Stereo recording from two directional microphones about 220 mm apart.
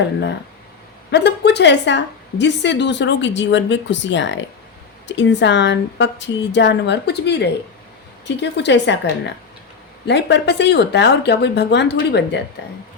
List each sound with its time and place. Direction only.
1.1 s a woman's voice: 50° left (ahead or behind)